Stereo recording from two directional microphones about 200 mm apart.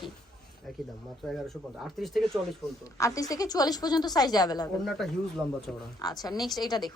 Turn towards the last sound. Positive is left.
turn(degrees=20)  # may be behind; listen again after turning